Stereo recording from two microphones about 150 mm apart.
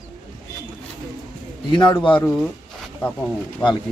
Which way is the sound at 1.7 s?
30° left (ahead or behind).